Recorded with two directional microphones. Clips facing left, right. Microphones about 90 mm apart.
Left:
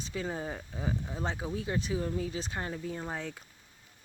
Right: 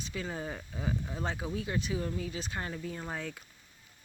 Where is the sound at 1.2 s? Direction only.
25° left (ahead or behind).